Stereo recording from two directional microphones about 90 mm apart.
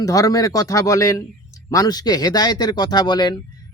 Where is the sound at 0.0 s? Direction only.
40° left (ahead or behind).